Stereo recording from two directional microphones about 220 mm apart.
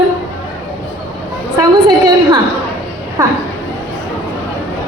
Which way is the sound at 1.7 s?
20° right (ahead or behind).